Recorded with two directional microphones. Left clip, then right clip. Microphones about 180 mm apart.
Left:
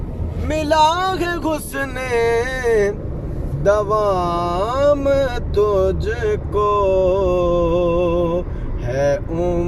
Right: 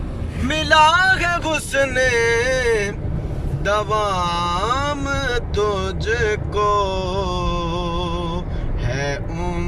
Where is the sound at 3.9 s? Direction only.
40° left (ahead or behind).